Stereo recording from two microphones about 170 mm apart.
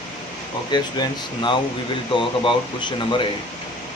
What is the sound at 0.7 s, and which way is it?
Speech, 25° left (ahead or behind).